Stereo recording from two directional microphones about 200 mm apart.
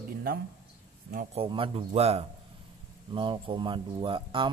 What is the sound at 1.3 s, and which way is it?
Speech, 25° right (ahead or behind).